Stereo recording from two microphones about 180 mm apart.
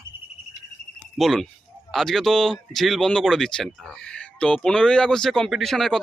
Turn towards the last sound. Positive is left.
turn(degrees=0)  # may be behind; listen again after turning